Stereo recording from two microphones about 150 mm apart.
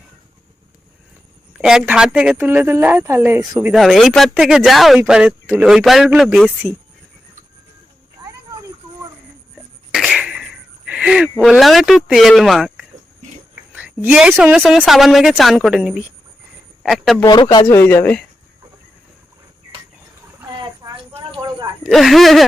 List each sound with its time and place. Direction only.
1.5 s speech: 5° right (ahead or behind)
3.7 s a woman's voice: centre (ahead or behind)
9.9 s a sound: centre (ahead or behind)
11.4 s a woman's voice: centre (ahead or behind)
17.5 s speech: 30° left (ahead or behind)
17.7 s speech: 15° left (ahead or behind)
20.8 s a sound: 20° right (ahead or behind)
21.8 s a woman's voice: centre (ahead or behind)